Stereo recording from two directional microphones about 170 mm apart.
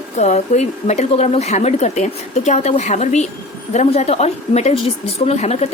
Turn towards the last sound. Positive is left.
turn(degrees=40)  # may be behind; listen again after turning